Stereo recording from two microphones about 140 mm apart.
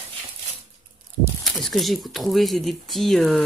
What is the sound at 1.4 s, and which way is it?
Speech, centre (ahead or behind).